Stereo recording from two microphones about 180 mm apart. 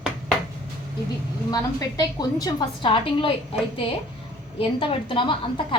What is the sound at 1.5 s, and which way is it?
A woman's voice, 20° left (ahead or behind).